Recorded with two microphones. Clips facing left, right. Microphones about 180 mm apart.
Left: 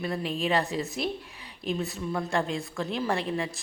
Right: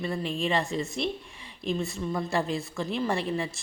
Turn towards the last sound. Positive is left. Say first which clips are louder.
# even
turn(degrees=0)  # may be behind; listen again after turning